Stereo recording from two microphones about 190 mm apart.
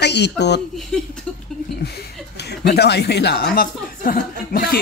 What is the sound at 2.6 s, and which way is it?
Speech, 60° left (ahead or behind).